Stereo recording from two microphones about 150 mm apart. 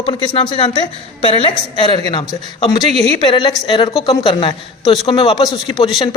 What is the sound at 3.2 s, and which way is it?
A man's voice, 35° left (ahead or behind).